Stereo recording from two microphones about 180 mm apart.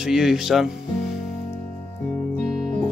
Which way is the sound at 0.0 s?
Centre (ahead or behind).